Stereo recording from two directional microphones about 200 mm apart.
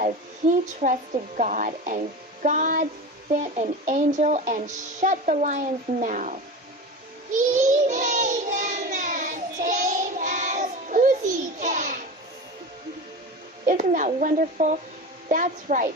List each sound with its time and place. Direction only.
0.8 s speech: 40° right (ahead or behind)
7.3 s child singing: 40° right (ahead or behind)
13.7 s speech: 40° right (ahead or behind)